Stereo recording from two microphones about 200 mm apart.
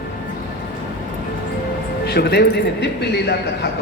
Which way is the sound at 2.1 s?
55° left (ahead or behind).